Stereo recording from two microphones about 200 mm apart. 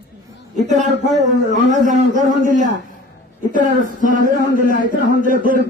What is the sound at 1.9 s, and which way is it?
Speech, 40° right (ahead or behind).